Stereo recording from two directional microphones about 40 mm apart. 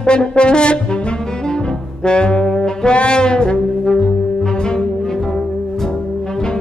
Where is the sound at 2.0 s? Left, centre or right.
Left.